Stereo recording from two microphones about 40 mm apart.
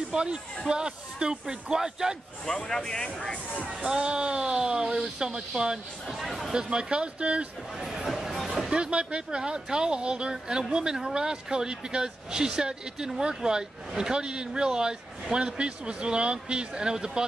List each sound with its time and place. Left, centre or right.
0.1 s speech: right
1.4 s speech: centre
2.4 s speech: centre
3.7 s speech: right
6.0 s speech: centre
6.5 s speech: right
7.7 s speech: centre
8.5 s speech: centre